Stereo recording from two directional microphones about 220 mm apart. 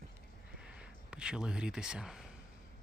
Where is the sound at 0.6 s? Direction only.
5° right (ahead or behind).